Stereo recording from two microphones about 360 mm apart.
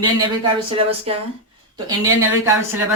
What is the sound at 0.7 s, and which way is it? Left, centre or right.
Speech, centre.